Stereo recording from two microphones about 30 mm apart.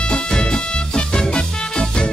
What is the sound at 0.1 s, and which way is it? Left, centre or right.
Music, left.